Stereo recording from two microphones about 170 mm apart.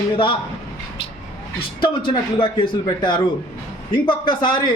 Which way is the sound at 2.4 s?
30° left (ahead or behind).